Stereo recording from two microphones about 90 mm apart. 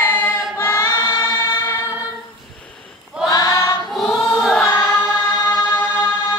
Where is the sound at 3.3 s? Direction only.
45° left (ahead or behind).